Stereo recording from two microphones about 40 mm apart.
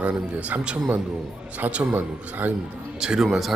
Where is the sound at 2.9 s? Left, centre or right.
Centre.